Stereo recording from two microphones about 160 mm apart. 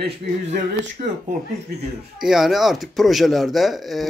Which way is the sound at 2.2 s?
5° right (ahead or behind).